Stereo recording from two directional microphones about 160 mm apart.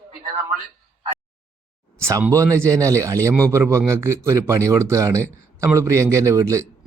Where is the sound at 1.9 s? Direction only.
15° right (ahead or behind).